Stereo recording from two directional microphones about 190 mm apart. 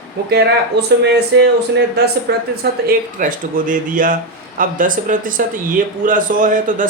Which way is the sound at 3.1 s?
45° right (ahead or behind).